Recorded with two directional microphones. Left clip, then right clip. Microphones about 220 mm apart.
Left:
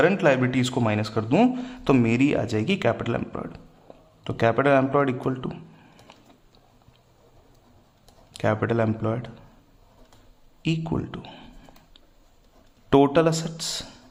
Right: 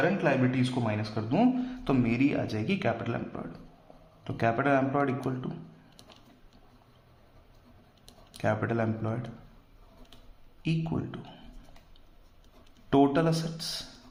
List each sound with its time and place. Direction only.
0.0 s speech: 35° left (ahead or behind)
8.3 s speech: 35° left (ahead or behind)
10.6 s speech: 35° left (ahead or behind)
12.9 s speech: 35° left (ahead or behind)